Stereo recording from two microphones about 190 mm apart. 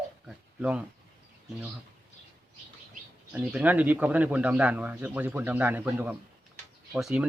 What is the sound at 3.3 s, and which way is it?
A man's voice, 5° right (ahead or behind).